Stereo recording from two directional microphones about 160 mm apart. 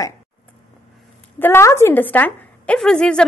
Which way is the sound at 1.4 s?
15° left (ahead or behind).